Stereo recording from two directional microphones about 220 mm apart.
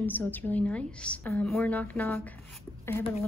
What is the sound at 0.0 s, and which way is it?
Speech, 10° left (ahead or behind).